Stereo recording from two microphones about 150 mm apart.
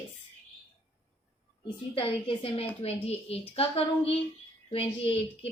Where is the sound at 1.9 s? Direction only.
40° left (ahead or behind).